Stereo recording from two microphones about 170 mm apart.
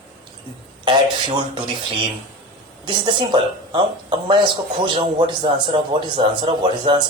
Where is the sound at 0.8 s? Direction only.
25° right (ahead or behind).